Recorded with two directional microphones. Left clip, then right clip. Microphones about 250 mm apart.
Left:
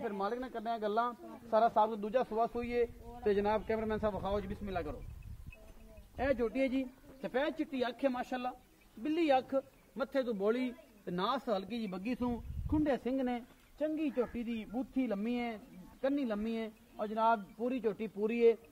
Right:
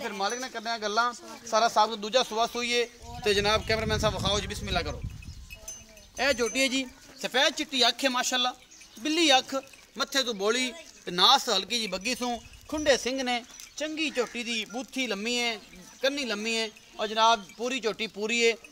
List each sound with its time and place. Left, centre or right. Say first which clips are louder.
0.2 s a man's voice: right 6 dB; centre; by 2.9 s right
3.3 s speech: right 7 dB; right
6.1 s speech: right 7 dB; right